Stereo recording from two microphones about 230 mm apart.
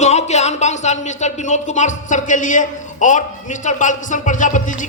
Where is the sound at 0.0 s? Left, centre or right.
Left.